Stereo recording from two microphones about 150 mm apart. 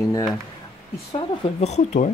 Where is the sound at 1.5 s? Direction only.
50° left (ahead or behind).